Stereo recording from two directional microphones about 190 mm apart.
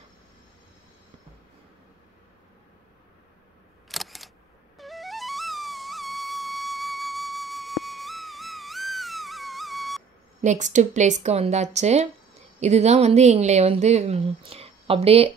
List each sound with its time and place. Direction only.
3.9 s single-lens reflex camera: centre (ahead or behind)
4.7 s music: centre (ahead or behind)
10.4 s a woman's voice: 40° right (ahead or behind)